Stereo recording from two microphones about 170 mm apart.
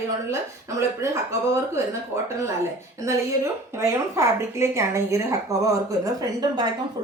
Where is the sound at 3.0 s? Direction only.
15° right (ahead or behind).